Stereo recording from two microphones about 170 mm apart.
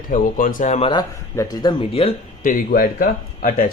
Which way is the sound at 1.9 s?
35° left (ahead or behind).